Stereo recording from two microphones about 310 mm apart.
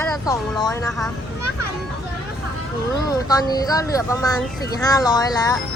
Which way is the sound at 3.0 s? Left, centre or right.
Centre.